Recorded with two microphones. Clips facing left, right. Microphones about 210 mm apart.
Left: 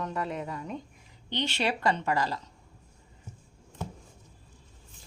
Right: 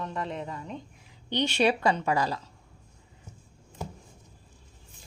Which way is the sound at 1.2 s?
15° right (ahead or behind).